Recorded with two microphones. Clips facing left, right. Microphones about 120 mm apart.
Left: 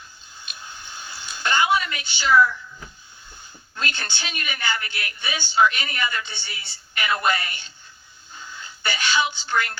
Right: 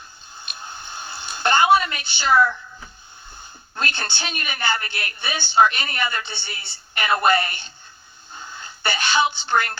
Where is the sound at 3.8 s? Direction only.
55° right (ahead or behind).